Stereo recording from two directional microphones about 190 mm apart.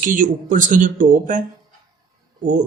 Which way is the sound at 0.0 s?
45° right (ahead or behind).